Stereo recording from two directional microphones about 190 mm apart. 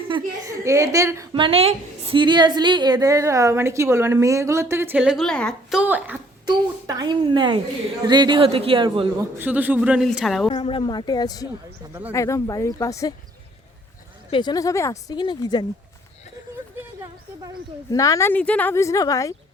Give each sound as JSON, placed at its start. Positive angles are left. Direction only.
{"t": 0.4, "sound": "a woman's voice", "side_deg": -15}
{"t": 5.8, "sound": "a woman's voice", "side_deg": -10}
{"t": 6.4, "sound": "speech", "side_deg": -20}
{"t": 9.4, "sound": "a woman's voice", "side_deg": -10}
{"t": 10.5, "sound": "speech", "side_deg": 25}
{"t": 14.3, "sound": "speech", "side_deg": 25}
{"t": 17.9, "sound": "speech", "side_deg": 15}